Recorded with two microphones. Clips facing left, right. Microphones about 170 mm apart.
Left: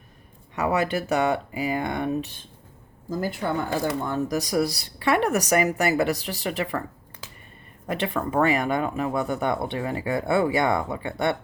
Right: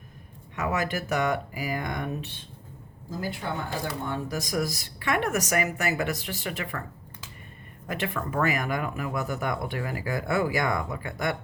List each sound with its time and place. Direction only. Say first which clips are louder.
0.5 s speech: left 5 dB; 35° left (ahead or behind)
3.8 s speech: left 6 dB; 40° left (ahead or behind)
7.9 s speech: left 4 dB; 30° left (ahead or behind)